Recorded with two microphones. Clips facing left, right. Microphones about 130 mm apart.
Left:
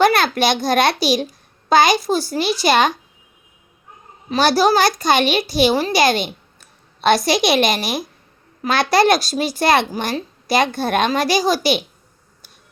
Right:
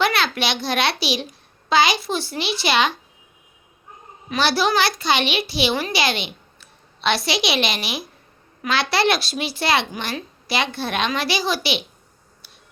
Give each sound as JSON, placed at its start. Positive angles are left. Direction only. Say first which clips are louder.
{"t": 0.0, "sound": "a child's voice", "louder": "left 6 dB", "side_deg": 45}
{"t": 4.3, "sound": "a child's voice", "louder": "left 5 dB", "side_deg": 40}